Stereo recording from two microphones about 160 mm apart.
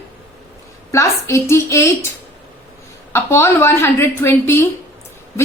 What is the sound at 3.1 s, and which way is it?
A woman's voice, 15° left (ahead or behind).